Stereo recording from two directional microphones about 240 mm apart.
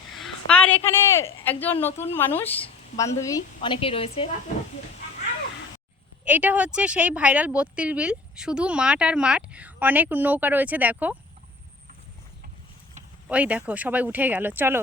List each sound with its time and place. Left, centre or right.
0.2 s a woman's voice: centre; by 4.3 s left
6.2 s speech: centre
13.2 s speech: centre